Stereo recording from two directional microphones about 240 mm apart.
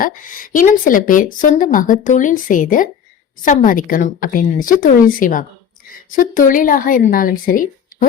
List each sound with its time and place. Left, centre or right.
0.0 s speech: left